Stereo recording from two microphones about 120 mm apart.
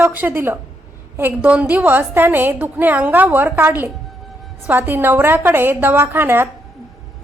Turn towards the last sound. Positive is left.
turn(degrees=-15)  # may be behind; listen again after turning